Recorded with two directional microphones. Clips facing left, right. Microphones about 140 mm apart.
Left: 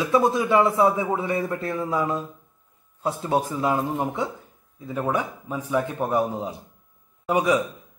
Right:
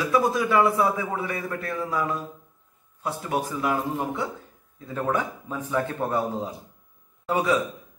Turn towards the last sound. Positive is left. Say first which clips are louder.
# left 2 dB
turn(degrees=15)  # may be behind; listen again after turning